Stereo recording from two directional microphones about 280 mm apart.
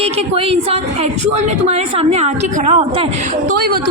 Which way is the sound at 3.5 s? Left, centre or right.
Right.